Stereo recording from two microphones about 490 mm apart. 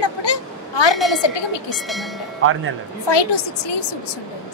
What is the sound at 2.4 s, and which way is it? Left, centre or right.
Speech, right.